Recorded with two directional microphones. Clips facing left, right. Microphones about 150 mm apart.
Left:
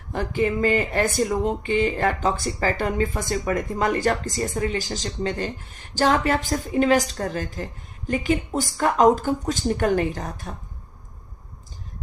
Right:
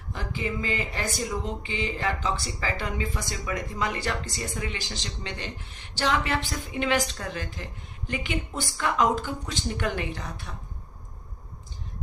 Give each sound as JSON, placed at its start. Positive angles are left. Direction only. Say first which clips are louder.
{"t": 0.1, "sound": "speech", "louder": "left 9 dB", "side_deg": 55}